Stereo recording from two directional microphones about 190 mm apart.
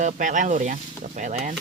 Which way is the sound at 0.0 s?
40° right (ahead or behind).